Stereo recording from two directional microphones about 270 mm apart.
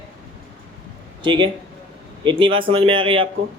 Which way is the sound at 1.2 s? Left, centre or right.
Centre.